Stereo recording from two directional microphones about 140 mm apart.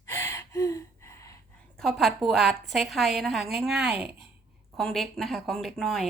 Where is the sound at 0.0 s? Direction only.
20° left (ahead or behind).